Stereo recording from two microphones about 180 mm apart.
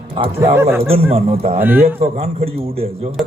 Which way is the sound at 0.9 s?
35° right (ahead or behind).